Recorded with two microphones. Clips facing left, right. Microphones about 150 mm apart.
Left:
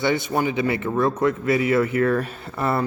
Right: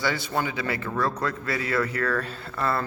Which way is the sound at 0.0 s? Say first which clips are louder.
Left 5 dB; 20° left (ahead or behind).